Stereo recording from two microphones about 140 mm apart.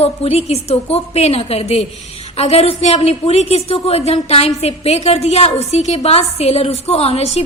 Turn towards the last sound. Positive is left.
turn(degrees=50)  # may be behind; listen again after turning